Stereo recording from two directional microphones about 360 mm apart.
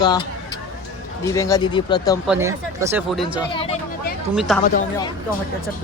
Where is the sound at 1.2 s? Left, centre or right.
Centre.